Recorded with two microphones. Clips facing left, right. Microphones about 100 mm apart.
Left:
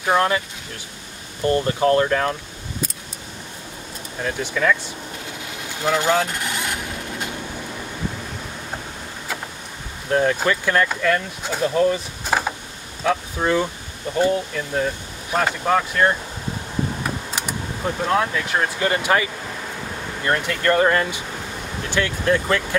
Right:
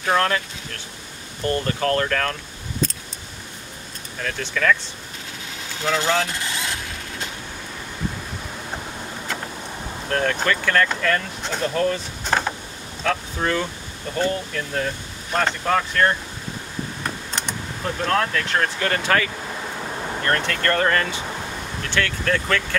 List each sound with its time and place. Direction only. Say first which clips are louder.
0.0 s speech: left 2 dB; 15° left (ahead or behind)
1.4 s speech: left 4 dB; 20° left (ahead or behind)
4.2 s speech: left 2 dB; 15° left (ahead or behind)
5.9 s speech: left 2 dB; 10° left (ahead or behind)
10.0 s speech: left 3 dB; 10° left (ahead or behind)
17.4 s speech: even; 10° left (ahead or behind)